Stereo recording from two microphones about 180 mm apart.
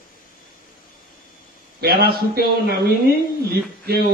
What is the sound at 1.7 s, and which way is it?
Speech, 60° right (ahead or behind).